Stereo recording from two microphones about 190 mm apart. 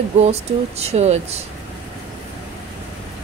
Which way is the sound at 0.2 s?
35° right (ahead or behind).